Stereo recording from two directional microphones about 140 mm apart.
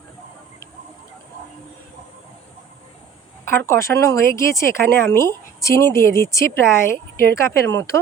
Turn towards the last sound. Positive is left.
turn(degrees=20)  # may be behind; listen again after turning